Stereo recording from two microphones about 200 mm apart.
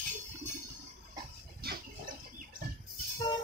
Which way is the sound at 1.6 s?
50° right (ahead or behind).